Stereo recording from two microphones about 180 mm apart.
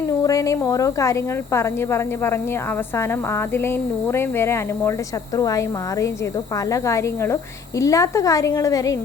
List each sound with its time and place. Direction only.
0.3 s a woman's voice: 20° left (ahead or behind)
4.1 s a woman's voice: 15° left (ahead or behind)